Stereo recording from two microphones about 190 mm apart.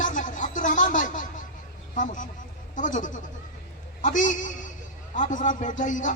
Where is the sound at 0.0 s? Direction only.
45° left (ahead or behind).